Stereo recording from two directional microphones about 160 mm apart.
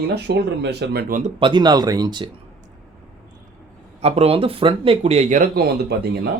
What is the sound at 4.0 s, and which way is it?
Speech, 40° right (ahead or behind).